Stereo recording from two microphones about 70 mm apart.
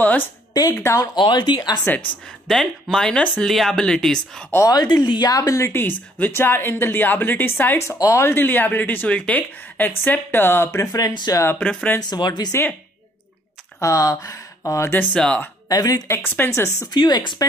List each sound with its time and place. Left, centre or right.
0.0 s speech: left
0.7 s speech: left
1.1 s speech: left
2.4 s speech: centre
4.6 s speech: left
5.3 s a woman's voice: left
8.3 s a woman's voice: left
12.0 s speech: left
13.7 s speech: left
15.1 s speech: centre
15.7 s speech: left
16.1 s a woman's voice: left
16.9 s speech: left